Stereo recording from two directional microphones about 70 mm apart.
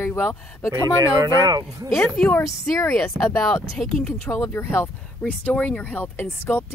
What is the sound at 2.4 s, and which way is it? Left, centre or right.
Speech, left.